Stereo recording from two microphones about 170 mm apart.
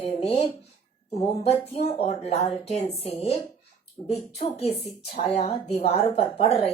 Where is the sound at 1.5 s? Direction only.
40° left (ahead or behind).